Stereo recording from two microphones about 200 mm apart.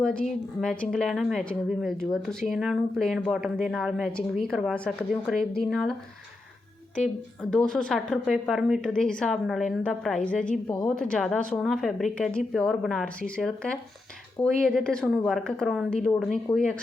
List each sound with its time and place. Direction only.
0.0 s a woman's voice: 5° left (ahead or behind)
7.5 s a woman's voice: 5° left (ahead or behind)